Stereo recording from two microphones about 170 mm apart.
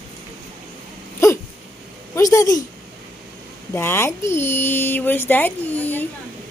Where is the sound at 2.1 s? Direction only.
20° left (ahead or behind).